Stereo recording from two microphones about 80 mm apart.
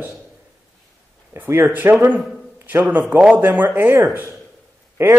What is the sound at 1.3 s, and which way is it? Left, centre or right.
Speech, right.